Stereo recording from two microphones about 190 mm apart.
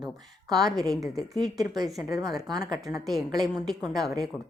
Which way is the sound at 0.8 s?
Centre (ahead or behind).